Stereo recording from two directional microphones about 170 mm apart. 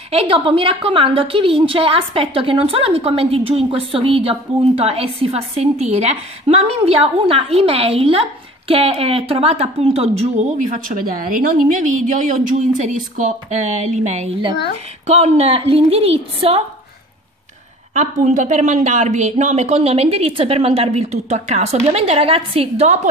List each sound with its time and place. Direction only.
0.1 s a woman's voice: 35° right (ahead or behind)
18.2 s a woman's voice: 45° right (ahead or behind)